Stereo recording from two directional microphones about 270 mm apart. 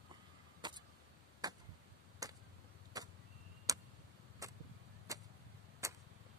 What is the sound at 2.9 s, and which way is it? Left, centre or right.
Vehicle, centre.